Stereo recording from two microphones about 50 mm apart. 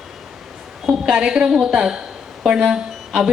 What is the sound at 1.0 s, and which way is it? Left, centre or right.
A woman's voice, centre.